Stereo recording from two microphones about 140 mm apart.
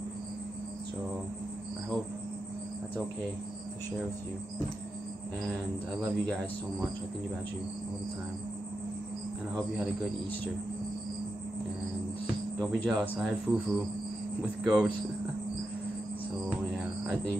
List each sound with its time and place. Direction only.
6.1 s speech: centre (ahead or behind)
12.5 s speech: 5° left (ahead or behind)
16.7 s music: centre (ahead or behind)